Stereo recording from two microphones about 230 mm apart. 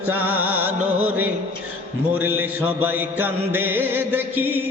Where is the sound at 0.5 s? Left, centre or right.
Centre.